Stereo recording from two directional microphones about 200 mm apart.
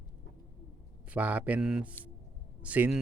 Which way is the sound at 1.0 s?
5° right (ahead or behind).